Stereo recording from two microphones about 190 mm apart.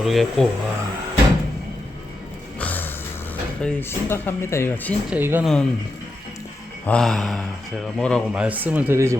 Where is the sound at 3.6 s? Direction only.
5° left (ahead or behind).